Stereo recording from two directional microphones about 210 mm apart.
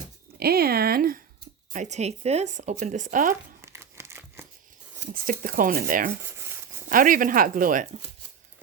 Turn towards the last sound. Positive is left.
turn(degrees=-40)  # may be behind; listen again after turning